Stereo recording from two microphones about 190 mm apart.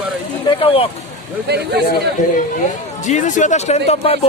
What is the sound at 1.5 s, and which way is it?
Speech, 60° right (ahead or behind).